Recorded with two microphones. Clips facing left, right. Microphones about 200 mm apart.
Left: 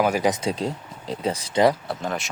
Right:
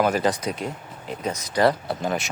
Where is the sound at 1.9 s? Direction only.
Centre (ahead or behind).